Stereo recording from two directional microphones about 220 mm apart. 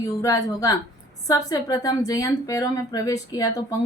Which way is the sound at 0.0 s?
15° left (ahead or behind).